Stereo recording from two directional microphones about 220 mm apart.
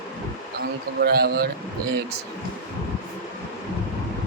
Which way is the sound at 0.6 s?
45° right (ahead or behind).